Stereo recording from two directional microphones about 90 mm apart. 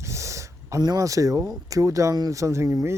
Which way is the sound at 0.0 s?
35° right (ahead or behind).